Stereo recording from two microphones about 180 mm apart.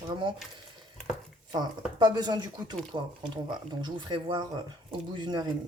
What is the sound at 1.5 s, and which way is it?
Speech, 25° right (ahead or behind).